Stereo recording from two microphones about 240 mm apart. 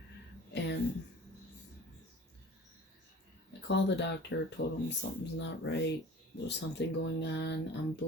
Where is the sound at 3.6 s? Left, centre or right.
Left.